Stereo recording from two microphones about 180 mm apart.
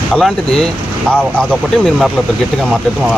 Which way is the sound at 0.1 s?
5° left (ahead or behind).